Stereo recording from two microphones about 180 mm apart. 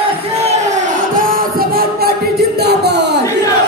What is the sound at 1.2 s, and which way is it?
Music, 50° right (ahead or behind).